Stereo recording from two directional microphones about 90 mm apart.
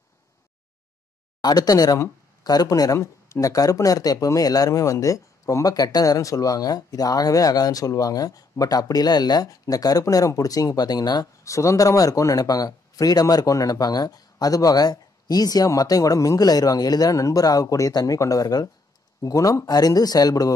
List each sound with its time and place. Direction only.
1.4 s speech: 45° left (ahead or behind)